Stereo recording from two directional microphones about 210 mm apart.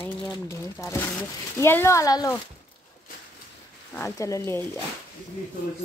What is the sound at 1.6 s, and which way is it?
Speech, 10° left (ahead or behind).